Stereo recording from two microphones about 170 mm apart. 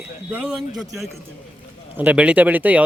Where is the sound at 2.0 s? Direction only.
10° right (ahead or behind).